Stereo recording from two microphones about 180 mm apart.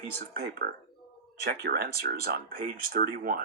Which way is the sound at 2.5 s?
55° right (ahead or behind).